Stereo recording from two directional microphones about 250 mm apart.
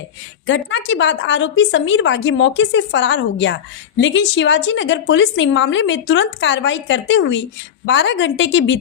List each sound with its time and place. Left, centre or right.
0.4 s a woman's voice: left